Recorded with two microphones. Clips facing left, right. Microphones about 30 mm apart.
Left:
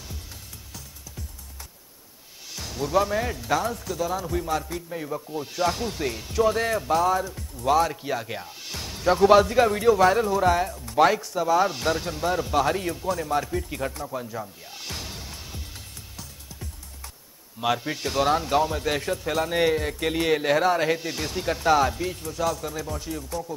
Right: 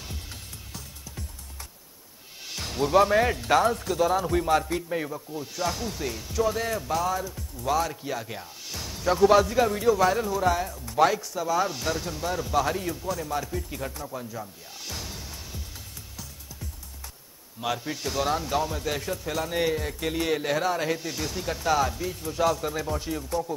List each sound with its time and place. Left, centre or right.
2.5 s speech: centre
5.1 s speech: centre
17.6 s speech: centre
22.2 s speech: centre